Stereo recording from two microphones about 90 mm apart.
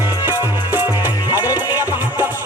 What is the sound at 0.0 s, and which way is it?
Music, 25° right (ahead or behind).